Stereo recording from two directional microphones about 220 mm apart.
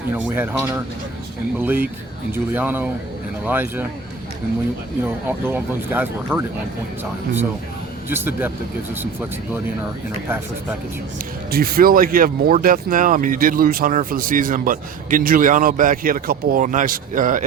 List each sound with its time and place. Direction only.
0.1 s speech: 10° right (ahead or behind)
5.2 s speech: 10° right (ahead or behind)
8.1 s speech: 10° right (ahead or behind)
11.5 s speech: 45° right (ahead or behind)